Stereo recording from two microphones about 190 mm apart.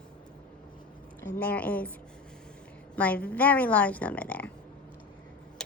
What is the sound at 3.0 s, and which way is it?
A woman's voice, 5° left (ahead or behind).